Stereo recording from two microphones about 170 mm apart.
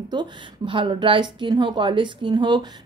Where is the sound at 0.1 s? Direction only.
25° right (ahead or behind).